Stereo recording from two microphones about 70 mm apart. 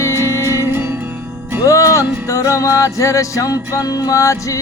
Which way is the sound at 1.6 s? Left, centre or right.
Left.